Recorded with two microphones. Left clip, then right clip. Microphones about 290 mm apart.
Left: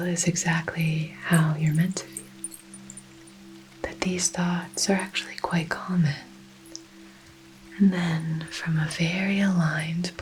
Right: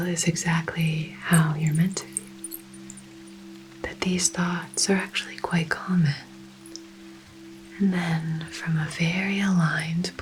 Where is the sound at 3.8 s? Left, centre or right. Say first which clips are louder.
Right 1 dB; left.